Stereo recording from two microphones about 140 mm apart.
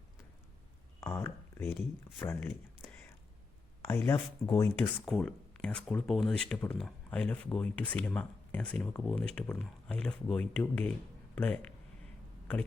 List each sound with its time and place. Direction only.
1.1 s speech: 15° left (ahead or behind)
2.4 s a sound: 15° left (ahead or behind)
3.8 s speech: 15° left (ahead or behind)
4.8 s speech: 10° left (ahead or behind)